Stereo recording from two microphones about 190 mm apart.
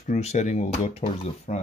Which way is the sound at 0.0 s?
40° left (ahead or behind).